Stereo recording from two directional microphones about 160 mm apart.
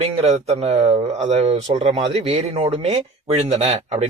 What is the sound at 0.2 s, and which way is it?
A man's voice, 45° right (ahead or behind).